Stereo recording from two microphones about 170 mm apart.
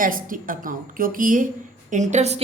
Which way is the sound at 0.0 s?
55° right (ahead or behind).